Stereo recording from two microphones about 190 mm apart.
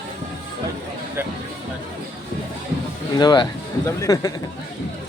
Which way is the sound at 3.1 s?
20° left (ahead or behind).